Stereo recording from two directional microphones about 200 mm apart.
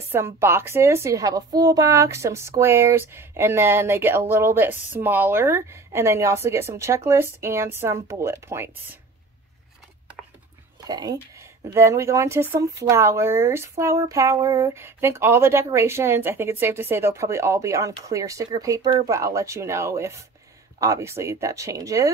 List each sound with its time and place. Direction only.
0.1 s speech: 10° right (ahead or behind)
10.8 s speech: 20° right (ahead or behind)